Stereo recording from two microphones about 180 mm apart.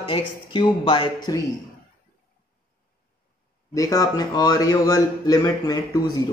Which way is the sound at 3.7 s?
20° left (ahead or behind).